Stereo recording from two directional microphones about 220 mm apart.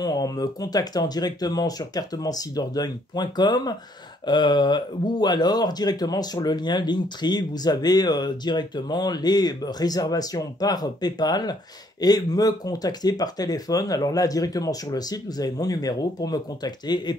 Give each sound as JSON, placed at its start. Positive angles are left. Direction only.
{"t": 0.0, "sound": "speech", "side_deg": 15}